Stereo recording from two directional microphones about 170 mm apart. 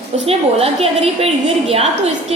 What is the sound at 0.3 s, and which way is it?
A woman's voice, 35° right (ahead or behind).